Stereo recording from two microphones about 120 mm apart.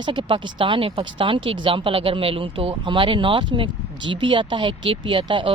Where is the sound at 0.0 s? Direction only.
40° right (ahead or behind).